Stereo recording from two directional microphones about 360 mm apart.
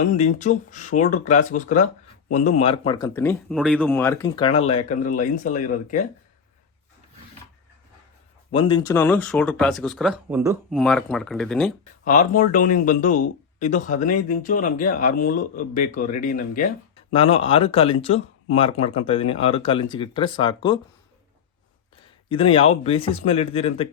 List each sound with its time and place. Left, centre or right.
0.0 s speech: centre
8.5 s speech: centre
12.0 s speech: left
22.3 s speech: centre